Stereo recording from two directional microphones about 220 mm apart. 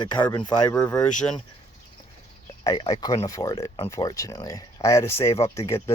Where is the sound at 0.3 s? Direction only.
15° left (ahead or behind).